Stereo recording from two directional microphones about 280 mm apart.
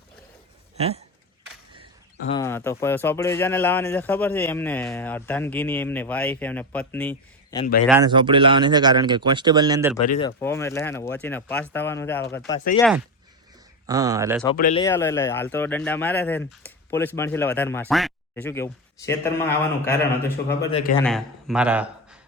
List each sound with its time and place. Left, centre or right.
0.8 s speech: right
2.4 s speech: centre
8.0 s speech: centre
10.1 s speech: centre
13.8 s speech: centre
14.5 s speech: left
14.8 s speech: centre
21.0 s speech: centre